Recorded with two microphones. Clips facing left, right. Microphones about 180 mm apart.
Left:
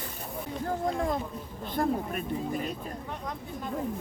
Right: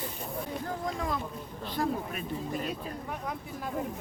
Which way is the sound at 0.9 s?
50° left (ahead or behind).